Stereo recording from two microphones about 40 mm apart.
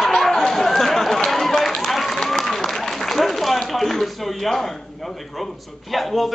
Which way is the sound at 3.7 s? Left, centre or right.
Centre.